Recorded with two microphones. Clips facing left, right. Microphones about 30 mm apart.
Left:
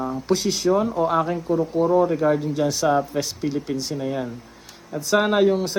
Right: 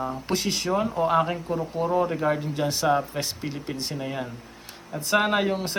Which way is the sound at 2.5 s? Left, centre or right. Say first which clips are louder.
Left 4 dB; right.